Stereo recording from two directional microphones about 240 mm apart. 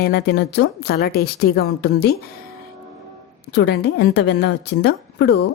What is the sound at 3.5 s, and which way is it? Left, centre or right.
A woman's voice, left.